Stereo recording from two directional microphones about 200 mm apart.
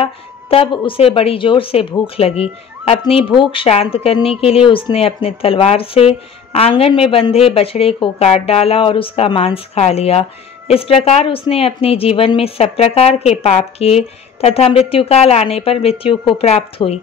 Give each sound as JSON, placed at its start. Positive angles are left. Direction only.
{"t": 0.0, "sound": "a woman's voice", "side_deg": 30}